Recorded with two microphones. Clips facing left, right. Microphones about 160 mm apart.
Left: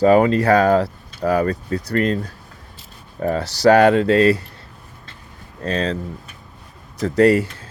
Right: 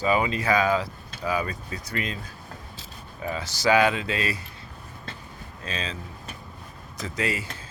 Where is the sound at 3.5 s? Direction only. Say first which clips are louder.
Left 9 dB; 70° left (ahead or behind).